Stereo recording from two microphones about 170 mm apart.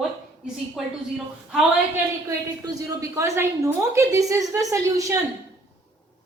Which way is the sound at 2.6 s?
20° right (ahead or behind).